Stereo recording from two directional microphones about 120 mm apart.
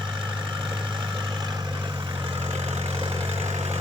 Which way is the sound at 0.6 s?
40° right (ahead or behind).